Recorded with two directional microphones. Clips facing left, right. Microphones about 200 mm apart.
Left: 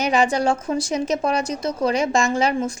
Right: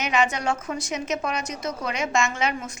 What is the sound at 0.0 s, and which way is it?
A woman's voice, 35° left (ahead or behind).